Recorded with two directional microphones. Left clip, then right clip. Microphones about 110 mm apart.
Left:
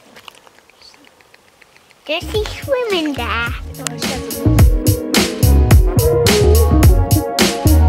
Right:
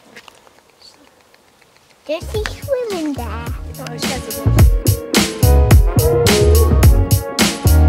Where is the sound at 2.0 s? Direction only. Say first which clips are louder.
Left 2 dB; 20° left (ahead or behind).